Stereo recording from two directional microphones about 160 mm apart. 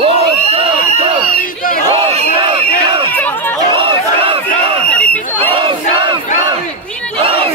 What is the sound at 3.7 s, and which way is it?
Crowd, 30° right (ahead or behind).